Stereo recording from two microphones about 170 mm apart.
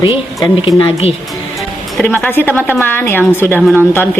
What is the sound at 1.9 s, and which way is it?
A woman's voice, 5° left (ahead or behind).